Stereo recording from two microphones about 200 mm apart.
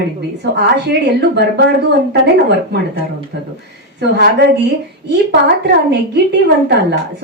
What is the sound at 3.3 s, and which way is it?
Speech, 60° right (ahead or behind).